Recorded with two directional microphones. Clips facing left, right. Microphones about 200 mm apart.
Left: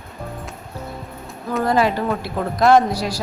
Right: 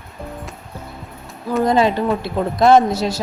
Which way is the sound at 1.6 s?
20° right (ahead or behind).